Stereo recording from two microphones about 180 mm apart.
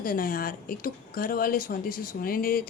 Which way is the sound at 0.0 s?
50° left (ahead or behind).